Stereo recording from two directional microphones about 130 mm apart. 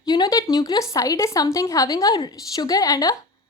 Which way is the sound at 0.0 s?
30° left (ahead or behind).